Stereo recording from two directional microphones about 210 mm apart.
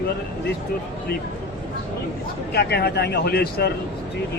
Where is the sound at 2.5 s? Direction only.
50° left (ahead or behind).